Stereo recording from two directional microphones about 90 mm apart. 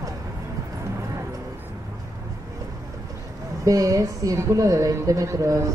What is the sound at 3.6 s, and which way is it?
A woman's voice, 40° right (ahead or behind).